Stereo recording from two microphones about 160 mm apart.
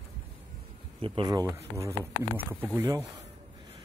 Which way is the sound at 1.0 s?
25° right (ahead or behind).